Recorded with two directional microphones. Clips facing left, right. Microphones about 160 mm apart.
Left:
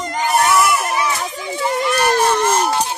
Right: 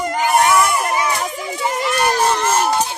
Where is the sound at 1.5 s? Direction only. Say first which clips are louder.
Left 2 dB; 15° right (ahead or behind).